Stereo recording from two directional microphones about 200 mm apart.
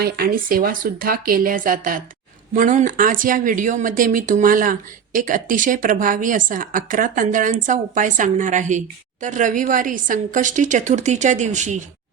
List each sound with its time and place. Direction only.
0.0 s a woman's voice: 50° right (ahead or behind)